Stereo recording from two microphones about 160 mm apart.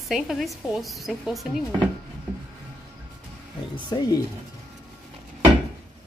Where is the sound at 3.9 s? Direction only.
20° left (ahead or behind).